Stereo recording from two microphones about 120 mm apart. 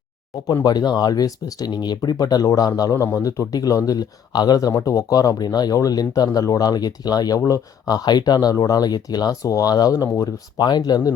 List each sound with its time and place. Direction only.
0.4 s speech: 35° left (ahead or behind)